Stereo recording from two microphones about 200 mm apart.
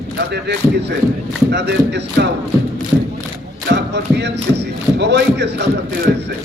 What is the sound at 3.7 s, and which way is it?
Speech, 60° right (ahead or behind).